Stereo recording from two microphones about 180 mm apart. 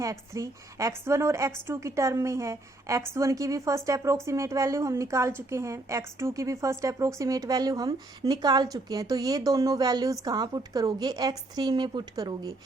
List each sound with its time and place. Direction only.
0.0 s a woman's voice: 20° right (ahead or behind)